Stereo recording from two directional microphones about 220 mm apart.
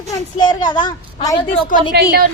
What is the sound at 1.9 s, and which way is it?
Speech, 45° right (ahead or behind).